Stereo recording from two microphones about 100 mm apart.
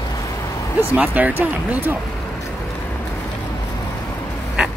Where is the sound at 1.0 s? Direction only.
15° right (ahead or behind).